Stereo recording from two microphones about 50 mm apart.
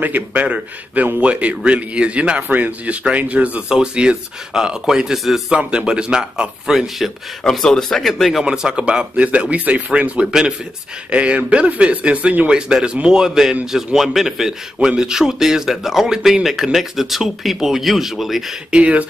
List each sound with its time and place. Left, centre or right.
0.0 s a man's voice: right
2.4 s a man's voice: right
3.6 s speech: centre
7.4 s speech: centre
8.1 s speech: centre
8.5 s a man's voice: centre
10.2 s speech: centre
11.1 s speech: right; by 18.4 s centre
18.7 s a man's voice: right